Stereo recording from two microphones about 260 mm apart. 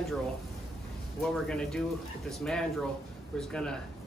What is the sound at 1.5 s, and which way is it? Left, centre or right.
Speech, centre.